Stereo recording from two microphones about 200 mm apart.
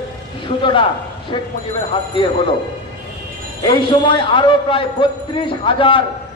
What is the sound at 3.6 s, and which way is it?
A man's voice, 25° left (ahead or behind).